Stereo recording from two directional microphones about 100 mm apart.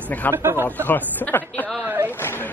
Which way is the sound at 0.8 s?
15° left (ahead or behind).